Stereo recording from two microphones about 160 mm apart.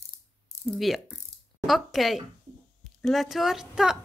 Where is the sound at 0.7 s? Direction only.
Centre (ahead or behind).